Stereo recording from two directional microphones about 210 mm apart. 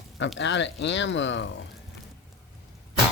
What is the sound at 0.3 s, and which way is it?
Speech, 60° left (ahead or behind).